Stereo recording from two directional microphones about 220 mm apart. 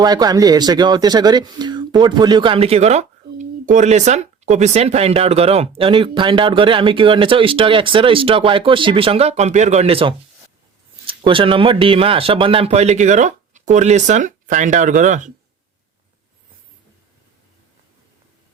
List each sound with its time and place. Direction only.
0.0 s speech: 20° right (ahead or behind); by 15.3 s 35° right (ahead or behind)